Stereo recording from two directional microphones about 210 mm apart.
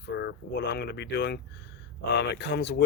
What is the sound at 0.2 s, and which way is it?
Speech, 55° left (ahead or behind).